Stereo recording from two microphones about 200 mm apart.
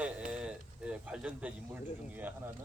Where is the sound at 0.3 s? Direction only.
5° right (ahead or behind).